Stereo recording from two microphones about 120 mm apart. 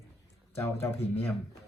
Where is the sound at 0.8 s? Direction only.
15° left (ahead or behind).